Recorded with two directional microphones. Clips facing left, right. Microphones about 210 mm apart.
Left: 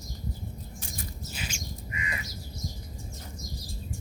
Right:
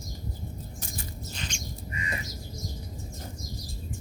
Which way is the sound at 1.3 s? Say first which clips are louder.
Even; 5° left (ahead or behind).